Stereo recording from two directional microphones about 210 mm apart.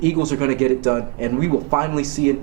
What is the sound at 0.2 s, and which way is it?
Speech, 20° right (ahead or behind).